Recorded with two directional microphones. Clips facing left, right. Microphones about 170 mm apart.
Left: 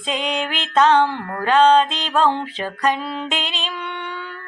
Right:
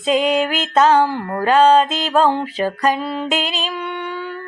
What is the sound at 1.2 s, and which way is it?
Music, 35° right (ahead or behind).